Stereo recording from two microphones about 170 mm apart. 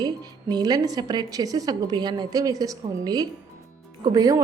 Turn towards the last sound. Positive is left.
turn(degrees=-20)  # may be behind; listen again after turning